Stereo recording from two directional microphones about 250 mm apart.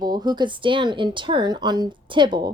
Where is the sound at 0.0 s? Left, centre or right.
Centre.